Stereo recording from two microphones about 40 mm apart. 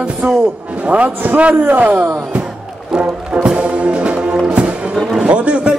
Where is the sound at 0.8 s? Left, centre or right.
Right.